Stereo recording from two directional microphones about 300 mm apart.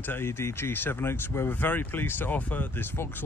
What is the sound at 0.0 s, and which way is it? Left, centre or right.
Speech, centre.